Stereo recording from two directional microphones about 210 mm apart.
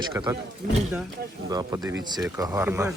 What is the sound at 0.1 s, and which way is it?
Speech, 15° right (ahead or behind).